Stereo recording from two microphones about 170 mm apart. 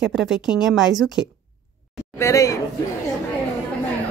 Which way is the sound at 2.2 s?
20° left (ahead or behind).